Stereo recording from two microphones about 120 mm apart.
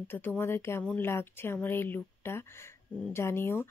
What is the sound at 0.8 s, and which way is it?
Speech, 10° left (ahead or behind).